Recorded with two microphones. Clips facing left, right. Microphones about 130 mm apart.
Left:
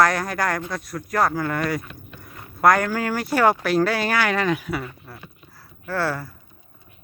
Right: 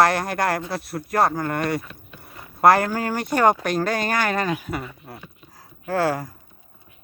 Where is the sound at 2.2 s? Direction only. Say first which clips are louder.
Right 2 dB; 30° right (ahead or behind).